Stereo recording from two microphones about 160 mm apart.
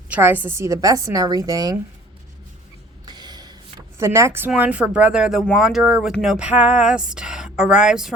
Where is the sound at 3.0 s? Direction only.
25° right (ahead or behind).